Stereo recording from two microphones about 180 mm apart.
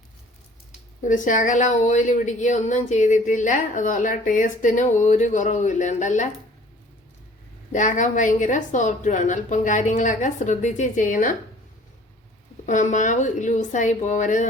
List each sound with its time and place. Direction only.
1.0 s speech: 45° left (ahead or behind)
7.7 s speech: 45° left (ahead or behind)
12.6 s speech: 45° left (ahead or behind)